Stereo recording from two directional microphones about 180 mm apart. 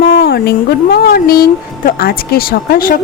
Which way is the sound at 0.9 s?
55° left (ahead or behind).